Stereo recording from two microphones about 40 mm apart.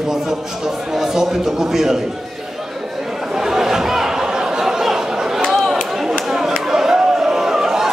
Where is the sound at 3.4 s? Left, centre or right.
Centre.